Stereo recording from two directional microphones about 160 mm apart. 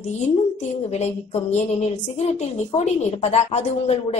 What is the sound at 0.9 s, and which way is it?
A woman's voice, 45° left (ahead or behind).